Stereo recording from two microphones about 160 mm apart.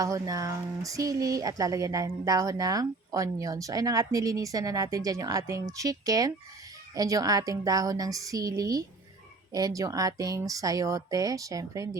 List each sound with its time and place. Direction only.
0.0 s speech: 20° right (ahead or behind)